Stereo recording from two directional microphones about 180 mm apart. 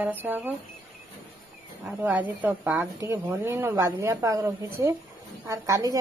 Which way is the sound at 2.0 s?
10° right (ahead or behind).